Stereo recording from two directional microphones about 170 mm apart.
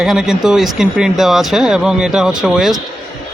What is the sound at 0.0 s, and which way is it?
A man's voice, centre (ahead or behind).